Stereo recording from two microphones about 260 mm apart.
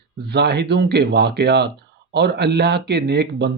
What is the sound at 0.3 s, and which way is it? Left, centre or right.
Speech, right.